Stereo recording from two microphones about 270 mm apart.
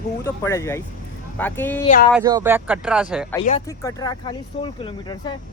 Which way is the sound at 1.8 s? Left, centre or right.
Left.